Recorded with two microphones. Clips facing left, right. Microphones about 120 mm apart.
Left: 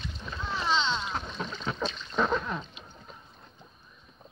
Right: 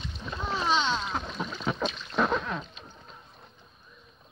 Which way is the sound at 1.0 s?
5° right (ahead or behind).